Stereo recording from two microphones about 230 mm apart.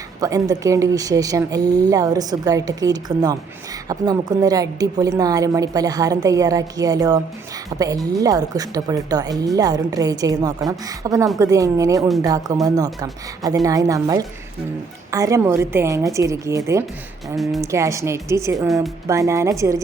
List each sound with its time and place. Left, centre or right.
0.2 s a woman's voice: centre
17.3 s a woman's voice: centre
17.6 s a woman's voice: centre
18.5 s a woman's voice: centre
19.0 s a woman's voice: centre